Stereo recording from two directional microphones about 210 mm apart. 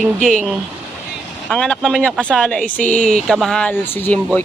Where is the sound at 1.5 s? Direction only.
5° left (ahead or behind).